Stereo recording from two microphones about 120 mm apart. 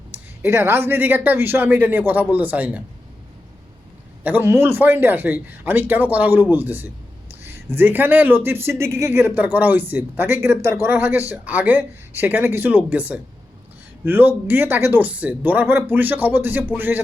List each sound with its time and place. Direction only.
0.1 s a man's voice: 20° right (ahead or behind)
4.2 s a man's voice: 15° right (ahead or behind)